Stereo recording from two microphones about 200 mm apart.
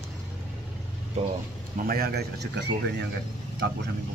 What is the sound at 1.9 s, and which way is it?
Speech, 50° right (ahead or behind).